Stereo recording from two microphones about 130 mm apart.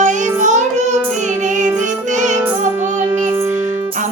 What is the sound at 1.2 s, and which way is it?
Music, 70° right (ahead or behind).